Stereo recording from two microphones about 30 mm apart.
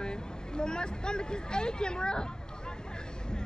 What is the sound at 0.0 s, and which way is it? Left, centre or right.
Speech, left.